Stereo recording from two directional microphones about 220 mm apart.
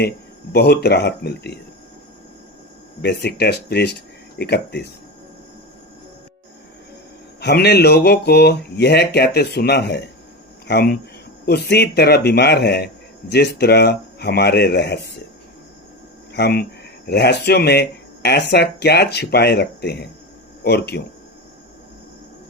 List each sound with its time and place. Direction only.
0.5 s a man's voice: 50° left (ahead or behind)
3.0 s a man's voice: 50° left (ahead or behind)
7.3 s a man's voice: 50° left (ahead or behind)
16.3 s a man's voice: 45° left (ahead or behind)